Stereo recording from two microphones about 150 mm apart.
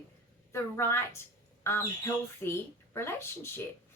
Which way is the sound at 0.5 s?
15° left (ahead or behind).